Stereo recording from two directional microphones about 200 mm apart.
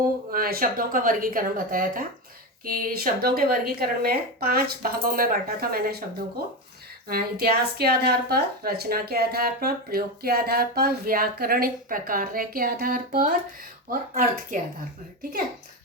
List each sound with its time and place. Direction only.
0.3 s a woman's voice: 45° right (ahead or behind)
7.1 s a woman's voice: 50° right (ahead or behind)